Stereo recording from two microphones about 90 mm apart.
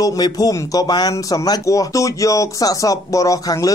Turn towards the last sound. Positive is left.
turn(degrees=40)  # may be behind; listen again after turning